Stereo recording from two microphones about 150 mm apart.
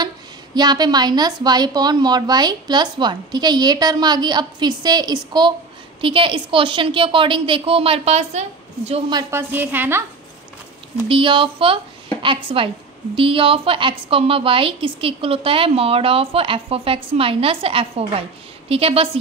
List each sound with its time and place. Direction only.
0.6 s a woman's voice: 30° right (ahead or behind); by 9.0 s 45° right (ahead or behind)
9.3 s a woman's voice: 15° right (ahead or behind)
11.1 s a woman's voice: 35° right (ahead or behind)